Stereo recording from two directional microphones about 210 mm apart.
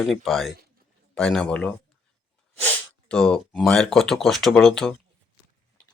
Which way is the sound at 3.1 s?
5° left (ahead or behind).